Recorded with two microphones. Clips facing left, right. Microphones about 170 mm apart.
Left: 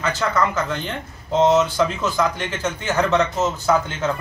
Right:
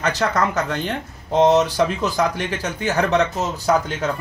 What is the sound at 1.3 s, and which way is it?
Speech, 15° right (ahead or behind).